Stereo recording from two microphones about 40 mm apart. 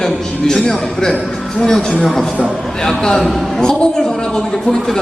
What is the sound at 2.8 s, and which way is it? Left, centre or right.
A man's voice, centre.